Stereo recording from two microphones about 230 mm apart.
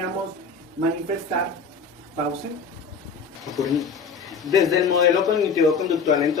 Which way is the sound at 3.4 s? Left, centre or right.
Centre.